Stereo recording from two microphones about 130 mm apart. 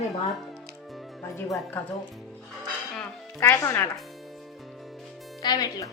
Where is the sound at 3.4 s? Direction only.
20° left (ahead or behind).